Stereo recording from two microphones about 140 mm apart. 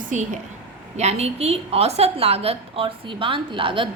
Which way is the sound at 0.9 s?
50° right (ahead or behind).